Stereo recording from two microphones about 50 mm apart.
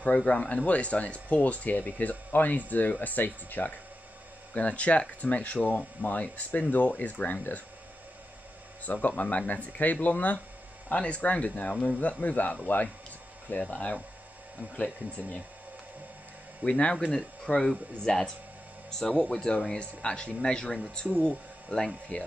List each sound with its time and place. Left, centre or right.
0.0 s speech: left
4.6 s speech: left
8.8 s speech: left
16.6 s speech: left